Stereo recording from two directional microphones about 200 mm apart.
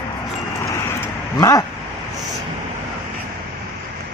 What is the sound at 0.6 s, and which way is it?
Vehicle, 15° left (ahead or behind).